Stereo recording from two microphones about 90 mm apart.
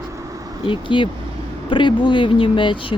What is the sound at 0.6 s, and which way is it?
Speech, 65° left (ahead or behind).